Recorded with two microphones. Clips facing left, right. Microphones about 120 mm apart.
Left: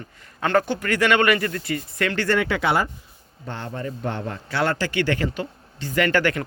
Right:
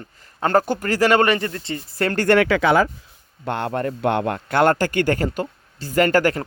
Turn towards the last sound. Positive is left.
turn(degrees=-40)  # may be behind; listen again after turning